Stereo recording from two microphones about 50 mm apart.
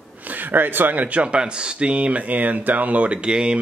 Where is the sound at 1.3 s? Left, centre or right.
Centre.